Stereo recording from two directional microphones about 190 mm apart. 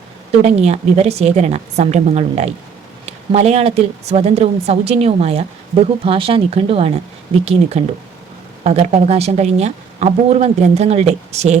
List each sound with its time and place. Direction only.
0.3 s a woman's voice: 30° right (ahead or behind)